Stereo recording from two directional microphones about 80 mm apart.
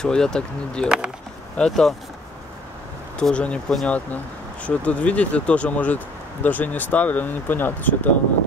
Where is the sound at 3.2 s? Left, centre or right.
Centre.